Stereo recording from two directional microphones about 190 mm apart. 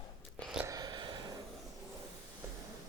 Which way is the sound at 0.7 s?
20° right (ahead or behind).